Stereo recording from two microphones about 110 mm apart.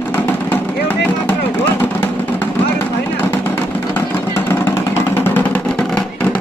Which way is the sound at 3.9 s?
20° left (ahead or behind).